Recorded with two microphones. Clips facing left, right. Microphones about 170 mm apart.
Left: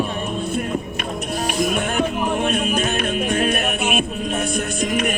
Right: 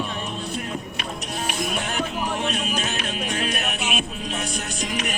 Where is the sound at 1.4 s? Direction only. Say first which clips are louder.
Left 6 dB; 45° left (ahead or behind).